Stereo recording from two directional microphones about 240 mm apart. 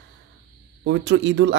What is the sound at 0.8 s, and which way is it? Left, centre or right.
Speech, right.